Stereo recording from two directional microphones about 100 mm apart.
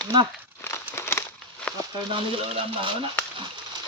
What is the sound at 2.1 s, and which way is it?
Speech, 65° right (ahead or behind).